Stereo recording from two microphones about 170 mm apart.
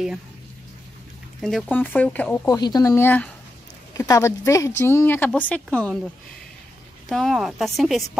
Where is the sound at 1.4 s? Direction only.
Centre (ahead or behind).